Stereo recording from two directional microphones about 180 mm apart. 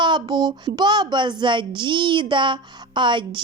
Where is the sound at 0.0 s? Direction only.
25° right (ahead or behind).